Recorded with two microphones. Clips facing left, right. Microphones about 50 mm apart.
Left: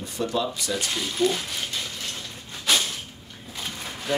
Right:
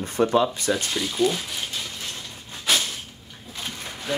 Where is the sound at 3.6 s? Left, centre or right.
Centre.